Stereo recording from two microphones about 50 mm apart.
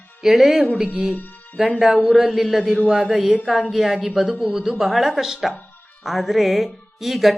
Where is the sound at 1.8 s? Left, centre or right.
Centre.